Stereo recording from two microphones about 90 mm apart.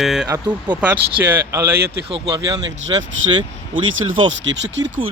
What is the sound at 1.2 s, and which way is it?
Speech, 30° right (ahead or behind).